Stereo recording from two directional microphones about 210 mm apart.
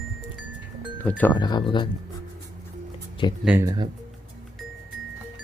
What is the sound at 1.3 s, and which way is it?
Speech, 20° left (ahead or behind).